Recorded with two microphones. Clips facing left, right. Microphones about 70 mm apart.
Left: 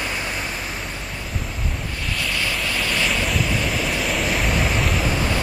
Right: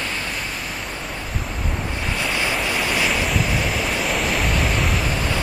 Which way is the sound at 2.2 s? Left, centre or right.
Right.